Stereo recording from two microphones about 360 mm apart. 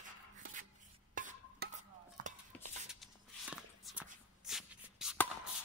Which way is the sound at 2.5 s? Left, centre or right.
Centre.